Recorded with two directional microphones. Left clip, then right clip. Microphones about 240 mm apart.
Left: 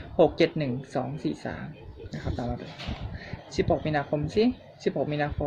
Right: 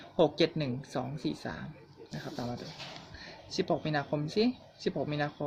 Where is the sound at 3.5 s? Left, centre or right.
Centre.